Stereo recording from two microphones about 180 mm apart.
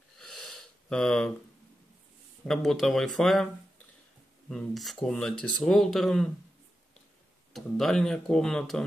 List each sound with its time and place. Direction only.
0.2 s a sound: centre (ahead or behind)
2.4 s speech: centre (ahead or behind)
4.5 s speech: centre (ahead or behind)
7.5 s speech: centre (ahead or behind)